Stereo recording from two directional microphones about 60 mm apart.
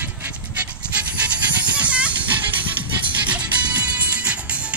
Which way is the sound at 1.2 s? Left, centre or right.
Right.